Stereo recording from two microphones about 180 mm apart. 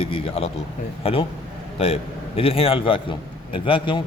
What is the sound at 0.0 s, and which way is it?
A man's voice, 30° left (ahead or behind).